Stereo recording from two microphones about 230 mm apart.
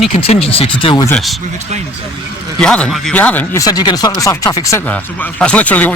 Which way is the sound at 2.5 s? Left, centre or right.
Centre.